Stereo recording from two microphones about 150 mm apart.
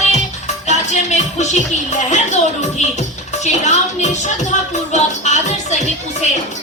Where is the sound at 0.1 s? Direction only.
50° left (ahead or behind).